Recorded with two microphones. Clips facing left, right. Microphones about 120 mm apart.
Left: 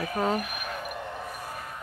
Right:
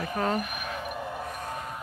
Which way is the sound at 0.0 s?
Centre (ahead or behind).